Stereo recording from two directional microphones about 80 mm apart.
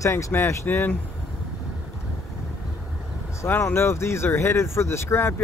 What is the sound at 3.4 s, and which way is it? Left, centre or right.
Speech, left.